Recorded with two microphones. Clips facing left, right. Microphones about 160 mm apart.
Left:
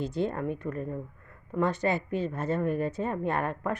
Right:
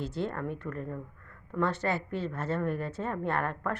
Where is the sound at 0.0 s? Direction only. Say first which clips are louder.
Left 4 dB; 15° left (ahead or behind).